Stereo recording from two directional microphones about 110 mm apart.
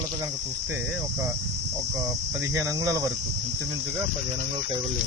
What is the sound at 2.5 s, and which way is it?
Cricket, 30° right (ahead or behind).